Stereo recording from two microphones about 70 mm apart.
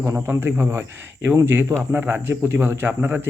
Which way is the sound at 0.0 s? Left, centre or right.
Right.